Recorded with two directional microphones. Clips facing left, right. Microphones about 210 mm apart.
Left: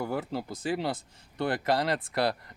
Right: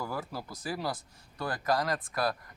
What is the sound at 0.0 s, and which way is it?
Speech, 25° left (ahead or behind).